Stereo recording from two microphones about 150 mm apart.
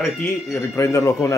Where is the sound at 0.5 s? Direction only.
20° left (ahead or behind).